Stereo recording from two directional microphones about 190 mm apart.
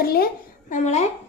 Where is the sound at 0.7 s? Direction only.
40° left (ahead or behind).